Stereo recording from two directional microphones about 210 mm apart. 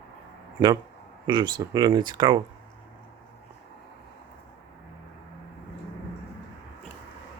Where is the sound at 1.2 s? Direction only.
20° right (ahead or behind).